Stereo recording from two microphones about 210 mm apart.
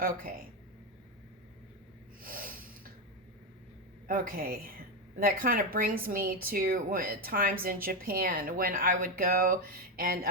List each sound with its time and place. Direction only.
0.0 s speech: 45° right (ahead or behind)
2.2 s snort: 40° right (ahead or behind)
4.0 s speech: 40° right (ahead or behind)